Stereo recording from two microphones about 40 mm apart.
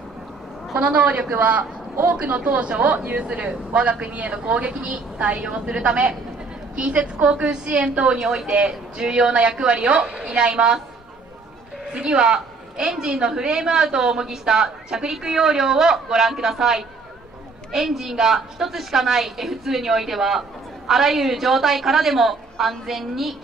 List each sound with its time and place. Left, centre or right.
0.7 s a woman's voice: right
3.3 s a woman's voice: right
8.2 s a woman's voice: centre
8.5 s a woman's voice: right
11.9 s a woman's voice: right; by 23.3 s centre